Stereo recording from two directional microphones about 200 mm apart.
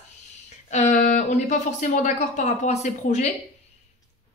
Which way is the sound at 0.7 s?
35° left (ahead or behind).